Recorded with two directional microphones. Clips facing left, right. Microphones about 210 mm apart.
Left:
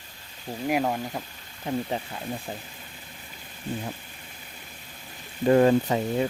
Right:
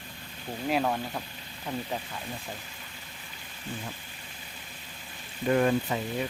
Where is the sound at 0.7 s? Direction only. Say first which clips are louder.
Left 2 dB; 15° left (ahead or behind).